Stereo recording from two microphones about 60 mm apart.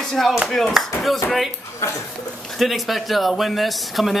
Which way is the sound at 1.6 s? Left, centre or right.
Left.